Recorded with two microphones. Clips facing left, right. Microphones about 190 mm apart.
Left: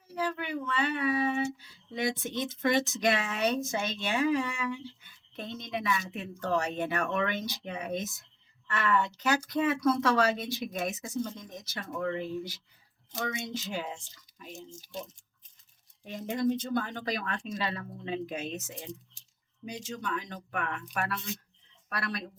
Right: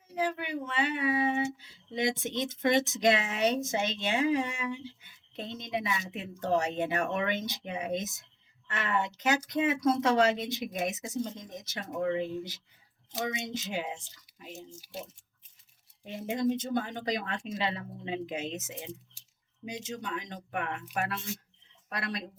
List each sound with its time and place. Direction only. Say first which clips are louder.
0.1 s speech: right 1 dB; 20° right (ahead or behind)
14.8 s speech: left 1 dB; 10° right (ahead or behind)
16.4 s speech: left 1 dB; 20° right (ahead or behind)